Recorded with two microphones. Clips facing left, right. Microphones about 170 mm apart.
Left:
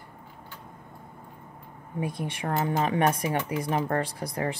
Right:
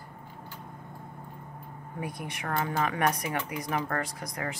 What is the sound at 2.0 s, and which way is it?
Speech, 25° left (ahead or behind).